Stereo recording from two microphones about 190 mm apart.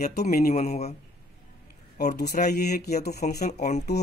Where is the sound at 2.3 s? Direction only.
40° left (ahead or behind).